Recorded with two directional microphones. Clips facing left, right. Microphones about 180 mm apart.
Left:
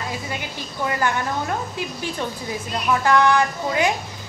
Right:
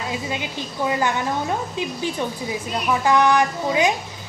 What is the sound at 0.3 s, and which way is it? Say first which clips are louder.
A woman's voice: right 3 dB; 20° right (ahead or behind).